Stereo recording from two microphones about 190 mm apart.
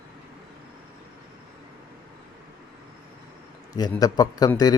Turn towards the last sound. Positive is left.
turn(degrees=20)  # may be behind; listen again after turning